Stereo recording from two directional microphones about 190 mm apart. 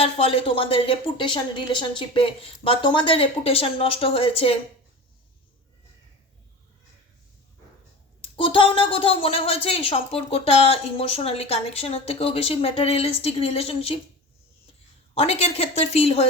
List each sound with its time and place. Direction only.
0.0 s a woman's voice: 30° left (ahead or behind)
8.4 s a woman's voice: 25° left (ahead or behind)
15.1 s a woman's voice: 30° left (ahead or behind)